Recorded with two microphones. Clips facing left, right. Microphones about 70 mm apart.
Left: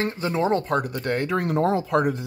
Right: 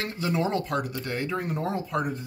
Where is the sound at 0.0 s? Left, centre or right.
Left.